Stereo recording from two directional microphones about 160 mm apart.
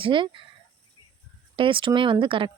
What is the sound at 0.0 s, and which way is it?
Speech, 30° right (ahead or behind).